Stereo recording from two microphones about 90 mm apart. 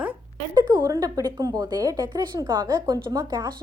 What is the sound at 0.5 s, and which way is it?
A woman's voice, 50° right (ahead or behind).